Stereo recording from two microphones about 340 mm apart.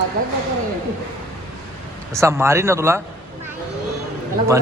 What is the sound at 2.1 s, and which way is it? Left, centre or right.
Speech, centre.